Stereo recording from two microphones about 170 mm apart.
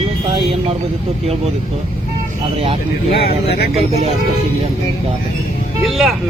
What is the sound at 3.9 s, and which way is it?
Speech, 40° right (ahead or behind).